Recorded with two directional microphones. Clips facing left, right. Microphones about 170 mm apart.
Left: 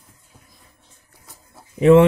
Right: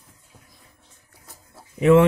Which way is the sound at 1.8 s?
30° left (ahead or behind).